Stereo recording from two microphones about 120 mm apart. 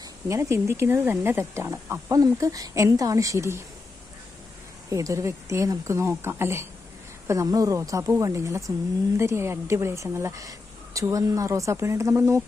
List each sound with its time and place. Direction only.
0.0 s speech: 25° right (ahead or behind)
4.9 s speech: 25° right (ahead or behind)